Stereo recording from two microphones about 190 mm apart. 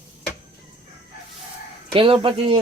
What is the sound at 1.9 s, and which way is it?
Speech, 30° right (ahead or behind).